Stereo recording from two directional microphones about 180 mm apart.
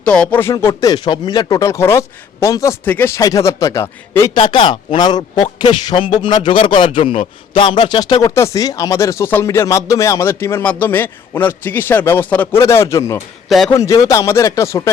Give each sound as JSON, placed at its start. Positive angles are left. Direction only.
{"t": 0.0, "sound": "a man's voice", "side_deg": 5}
{"t": 0.5, "sound": "a man's voice", "side_deg": 20}
{"t": 4.4, "sound": "a man's voice", "side_deg": 25}